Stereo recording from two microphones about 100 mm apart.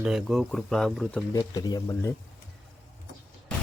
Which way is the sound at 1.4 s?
40° left (ahead or behind).